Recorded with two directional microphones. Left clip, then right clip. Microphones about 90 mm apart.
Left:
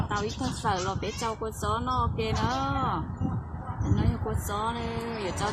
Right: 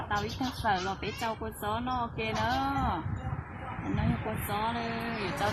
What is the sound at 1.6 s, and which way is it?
Speech, 15° right (ahead or behind).